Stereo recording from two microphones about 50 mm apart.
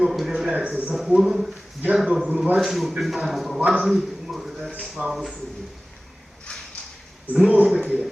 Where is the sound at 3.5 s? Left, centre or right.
Right.